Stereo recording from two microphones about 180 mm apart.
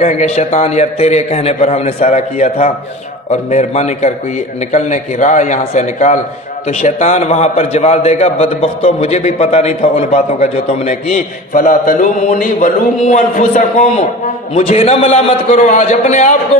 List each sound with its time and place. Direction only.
0.0 s a man's voice: 40° left (ahead or behind)
14.5 s a man's voice: 35° left (ahead or behind)